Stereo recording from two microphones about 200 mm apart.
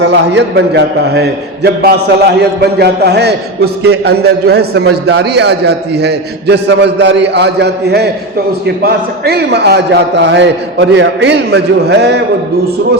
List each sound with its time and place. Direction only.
0.0 s a man's voice: 60° right (ahead or behind)